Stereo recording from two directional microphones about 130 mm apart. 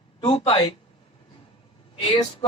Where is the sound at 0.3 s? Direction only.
45° left (ahead or behind).